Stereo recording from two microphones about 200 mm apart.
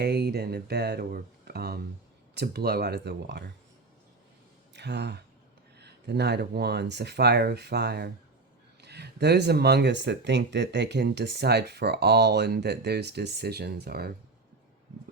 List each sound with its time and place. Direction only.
0.0 s speech: 55° right (ahead or behind)
4.7 s speech: 60° right (ahead or behind)